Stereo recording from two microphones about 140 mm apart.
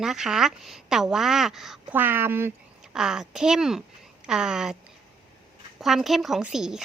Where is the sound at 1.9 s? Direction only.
15° right (ahead or behind).